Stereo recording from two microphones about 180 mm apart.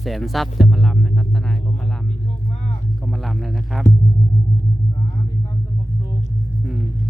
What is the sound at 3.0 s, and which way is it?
Music, centre (ahead or behind).